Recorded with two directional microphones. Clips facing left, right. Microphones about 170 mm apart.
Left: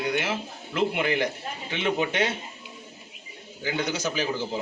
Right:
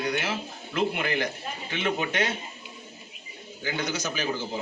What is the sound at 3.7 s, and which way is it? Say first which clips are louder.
Speech: left 2 dB; 30° left (ahead or behind).